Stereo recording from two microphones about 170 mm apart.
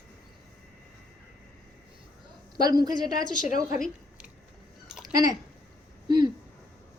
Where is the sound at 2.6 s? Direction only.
25° right (ahead or behind).